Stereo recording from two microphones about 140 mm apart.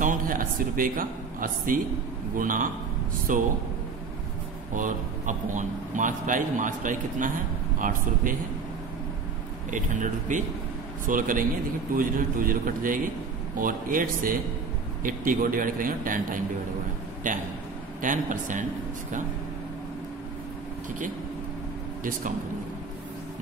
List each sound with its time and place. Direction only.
0.0 s a man's voice: 75° right (ahead or behind)
4.7 s speech: 65° right (ahead or behind)
9.7 s speech: 65° right (ahead or behind)
11.1 s speech: 75° right (ahead or behind)